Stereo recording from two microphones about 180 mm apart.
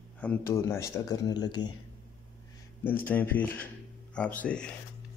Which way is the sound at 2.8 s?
10° left (ahead or behind).